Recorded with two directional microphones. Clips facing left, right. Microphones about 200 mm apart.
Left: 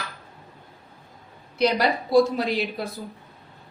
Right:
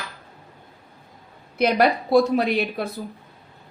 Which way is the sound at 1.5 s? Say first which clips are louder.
Right 3 dB; 55° right (ahead or behind).